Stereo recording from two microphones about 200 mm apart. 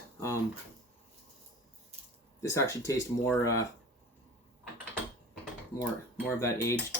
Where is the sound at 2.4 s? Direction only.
15° left (ahead or behind).